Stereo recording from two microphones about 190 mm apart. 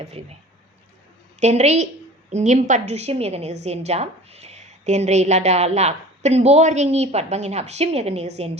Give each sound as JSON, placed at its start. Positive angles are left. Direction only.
{"t": 0.0, "sound": "a woman's voice", "side_deg": -35}
{"t": 1.4, "sound": "a woman's voice", "side_deg": -35}